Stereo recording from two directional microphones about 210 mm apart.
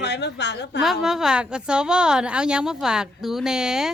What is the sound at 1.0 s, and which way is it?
Speech, centre (ahead or behind).